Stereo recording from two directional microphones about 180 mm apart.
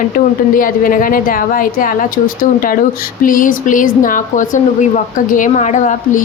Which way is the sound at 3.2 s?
50° left (ahead or behind).